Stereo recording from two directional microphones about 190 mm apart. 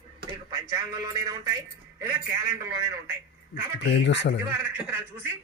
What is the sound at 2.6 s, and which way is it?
Speech, 15° right (ahead or behind).